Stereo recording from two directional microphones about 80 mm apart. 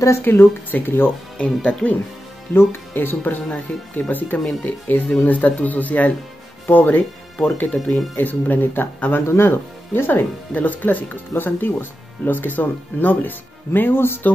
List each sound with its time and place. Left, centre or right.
0.2 s speech: left
1.4 s speech: centre
2.5 s speech: left
7.7 s speech: centre
8.2 s speech: left